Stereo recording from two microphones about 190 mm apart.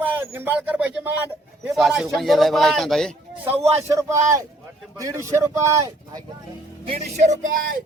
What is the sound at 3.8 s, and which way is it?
Speech, 15° right (ahead or behind).